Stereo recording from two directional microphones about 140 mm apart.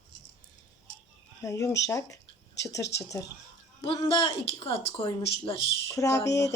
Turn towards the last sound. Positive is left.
turn(degrees=25)  # may be behind; listen again after turning